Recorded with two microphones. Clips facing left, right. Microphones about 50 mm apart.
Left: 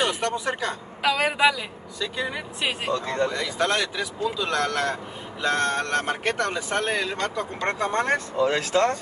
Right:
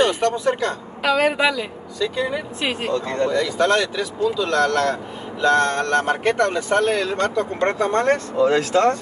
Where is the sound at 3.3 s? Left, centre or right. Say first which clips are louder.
Right 6 dB; centre.